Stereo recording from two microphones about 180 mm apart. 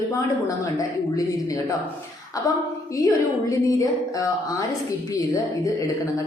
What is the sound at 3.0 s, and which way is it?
A woman's voice, 20° left (ahead or behind).